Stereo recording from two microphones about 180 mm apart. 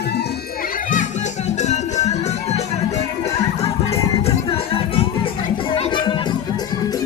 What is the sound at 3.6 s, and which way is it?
Music, 35° left (ahead or behind).